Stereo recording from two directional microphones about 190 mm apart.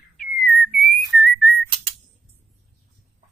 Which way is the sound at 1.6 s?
30° right (ahead or behind).